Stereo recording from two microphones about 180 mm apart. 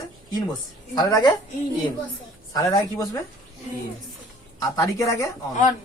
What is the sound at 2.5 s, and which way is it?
Speech, 20° left (ahead or behind).